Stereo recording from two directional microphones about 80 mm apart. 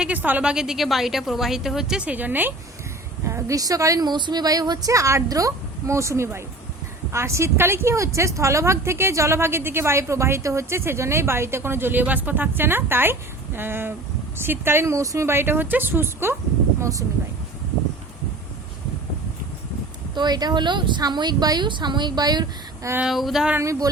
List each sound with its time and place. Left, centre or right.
0.0 s a woman's voice: centre
0.5 s a woman's voice: centre; by 2.5 s right
3.2 s a woman's voice: right
4.0 s a woman's voice: right
15.3 s a woman's voice: right
16.8 s a woman's voice: right
20.1 s speech: right
21.0 s a woman's voice: right
23.0 s a woman's voice: centre